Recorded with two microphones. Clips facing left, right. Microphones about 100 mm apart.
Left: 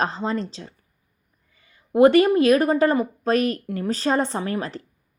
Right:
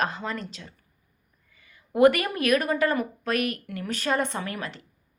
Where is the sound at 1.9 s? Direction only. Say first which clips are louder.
Left 5 dB; 25° left (ahead or behind).